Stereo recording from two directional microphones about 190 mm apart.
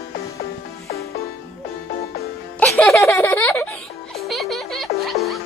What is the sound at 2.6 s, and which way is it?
Music, 5° left (ahead or behind).